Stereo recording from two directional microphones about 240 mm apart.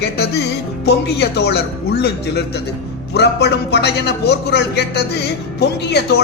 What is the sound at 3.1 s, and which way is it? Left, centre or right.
A man's voice, left.